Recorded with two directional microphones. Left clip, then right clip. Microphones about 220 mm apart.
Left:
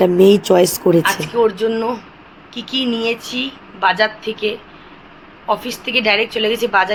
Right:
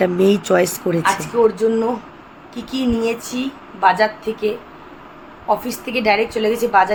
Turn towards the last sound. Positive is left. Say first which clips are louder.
# even
turn(degrees=-10)  # may be behind; listen again after turning